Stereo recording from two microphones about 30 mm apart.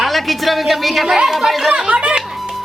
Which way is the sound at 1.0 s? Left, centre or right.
Right.